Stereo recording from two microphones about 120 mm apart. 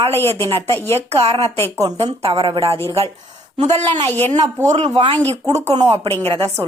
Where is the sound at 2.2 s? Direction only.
45° right (ahead or behind).